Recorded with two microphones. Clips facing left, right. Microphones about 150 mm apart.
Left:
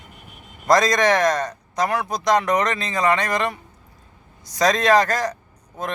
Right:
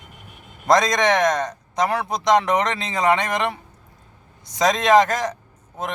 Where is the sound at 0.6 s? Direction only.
20° right (ahead or behind).